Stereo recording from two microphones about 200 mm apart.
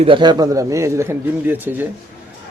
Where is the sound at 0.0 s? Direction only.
25° right (ahead or behind).